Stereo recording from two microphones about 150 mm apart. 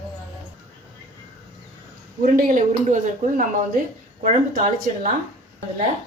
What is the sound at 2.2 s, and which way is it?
Speech, 70° right (ahead or behind).